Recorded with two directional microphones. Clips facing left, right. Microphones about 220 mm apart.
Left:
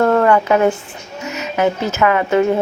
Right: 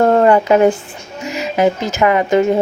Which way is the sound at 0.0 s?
30° right (ahead or behind).